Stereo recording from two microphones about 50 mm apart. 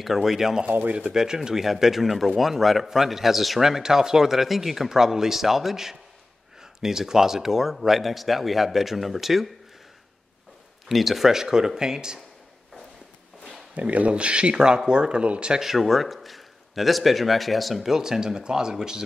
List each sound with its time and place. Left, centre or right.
0.0 s speech: centre
0.7 s speech: right
0.9 s speech: centre
10.9 s speech: centre
13.7 s speech: right
15.6 s speech: centre